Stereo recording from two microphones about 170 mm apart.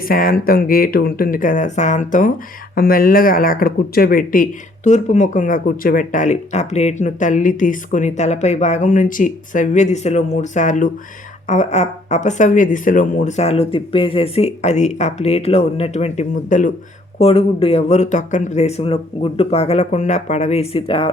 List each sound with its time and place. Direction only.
0.1 s speech: 55° left (ahead or behind)
2.7 s speech: 60° left (ahead or behind)
17.2 s speech: 35° left (ahead or behind)